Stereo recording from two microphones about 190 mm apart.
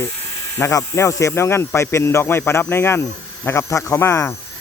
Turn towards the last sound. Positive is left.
turn(degrees=15)  # may be behind; listen again after turning